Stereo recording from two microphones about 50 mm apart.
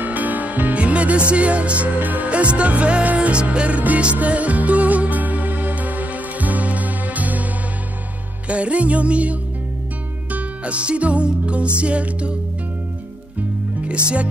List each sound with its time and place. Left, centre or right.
0.0 s music: right
8.5 s music: right